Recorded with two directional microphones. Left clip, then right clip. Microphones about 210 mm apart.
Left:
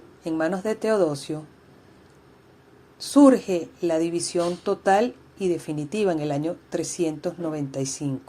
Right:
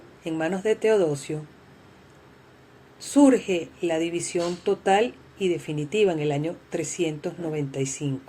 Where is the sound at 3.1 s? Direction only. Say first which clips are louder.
Left 2 dB; 20° left (ahead or behind).